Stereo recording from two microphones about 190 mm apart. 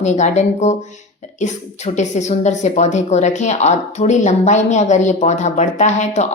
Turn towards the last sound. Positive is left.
turn(degrees=40)  # may be behind; listen again after turning